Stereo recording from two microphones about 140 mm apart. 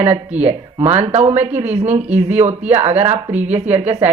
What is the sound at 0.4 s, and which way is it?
Speech, 50° right (ahead or behind).